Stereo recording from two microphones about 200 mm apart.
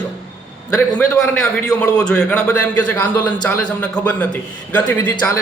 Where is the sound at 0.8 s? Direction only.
10° left (ahead or behind).